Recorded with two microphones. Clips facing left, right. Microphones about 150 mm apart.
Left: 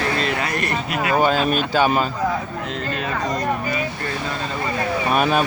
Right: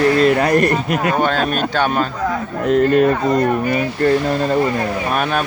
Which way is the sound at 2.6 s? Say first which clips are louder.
Right 13 dB; 50° right (ahead or behind).